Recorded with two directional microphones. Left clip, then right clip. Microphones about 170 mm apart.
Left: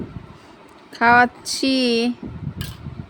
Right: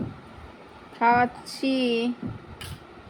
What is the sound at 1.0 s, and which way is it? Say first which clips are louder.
Speech: left 6 dB; 70° left (ahead or behind).